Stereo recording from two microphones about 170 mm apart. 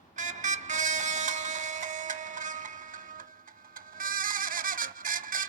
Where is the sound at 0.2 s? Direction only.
45° right (ahead or behind).